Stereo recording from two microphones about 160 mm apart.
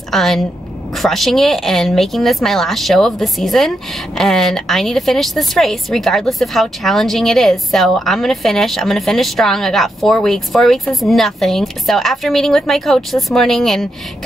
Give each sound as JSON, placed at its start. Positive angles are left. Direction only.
{"t": 0.1, "sound": "a woman's voice", "side_deg": 0}